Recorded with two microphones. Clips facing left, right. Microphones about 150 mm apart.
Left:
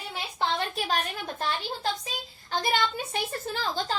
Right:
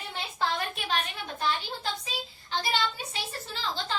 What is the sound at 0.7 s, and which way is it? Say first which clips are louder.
Speech: left 3 dB; 40° left (ahead or behind).